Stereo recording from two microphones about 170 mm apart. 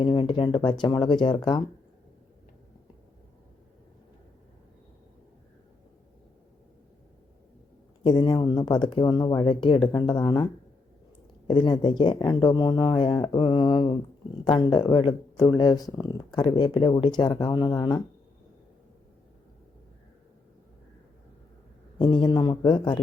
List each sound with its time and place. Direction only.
0.0 s speech: 30° left (ahead or behind)
8.0 s speech: 25° left (ahead or behind)
21.9 s speech: 30° left (ahead or behind)